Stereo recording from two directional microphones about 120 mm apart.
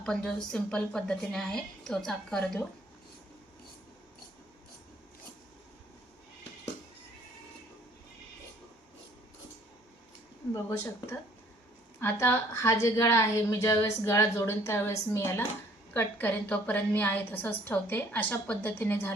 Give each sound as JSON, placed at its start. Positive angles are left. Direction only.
{"t": 0.0, "sound": "a woman's voice", "side_deg": 5}
{"t": 10.7, "sound": "a woman's voice", "side_deg": 20}